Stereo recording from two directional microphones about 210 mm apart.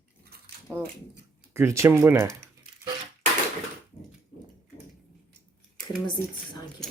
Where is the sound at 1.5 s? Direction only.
15° right (ahead or behind).